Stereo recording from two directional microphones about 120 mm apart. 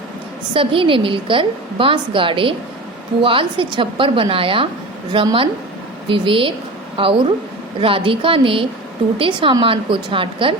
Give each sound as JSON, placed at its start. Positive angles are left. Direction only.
{"t": 0.5, "sound": "a woman's voice", "side_deg": -45}